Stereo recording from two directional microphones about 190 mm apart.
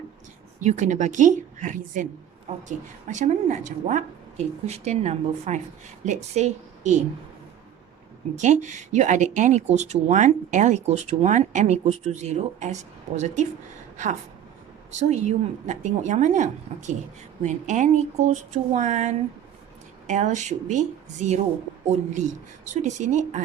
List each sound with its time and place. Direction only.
0.6 s speech: 40° right (ahead or behind)
8.4 s speech: 40° right (ahead or behind)